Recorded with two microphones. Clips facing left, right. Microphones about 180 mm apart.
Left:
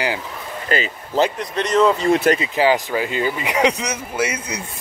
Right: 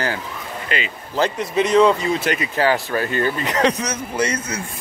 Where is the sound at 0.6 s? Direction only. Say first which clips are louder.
Left 5 dB; 40° left (ahead or behind).